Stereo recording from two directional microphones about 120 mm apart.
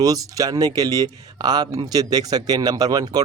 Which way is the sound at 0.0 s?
30° right (ahead or behind).